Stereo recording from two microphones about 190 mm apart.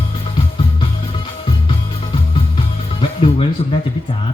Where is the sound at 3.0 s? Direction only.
30° left (ahead or behind).